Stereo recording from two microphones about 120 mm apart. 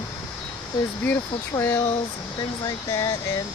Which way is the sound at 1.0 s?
15° left (ahead or behind).